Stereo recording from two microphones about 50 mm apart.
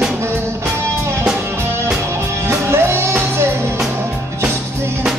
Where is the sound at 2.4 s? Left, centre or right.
Right.